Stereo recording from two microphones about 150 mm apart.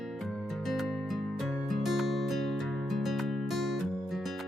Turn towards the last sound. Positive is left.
turn(degrees=0)  # may be behind; listen again after turning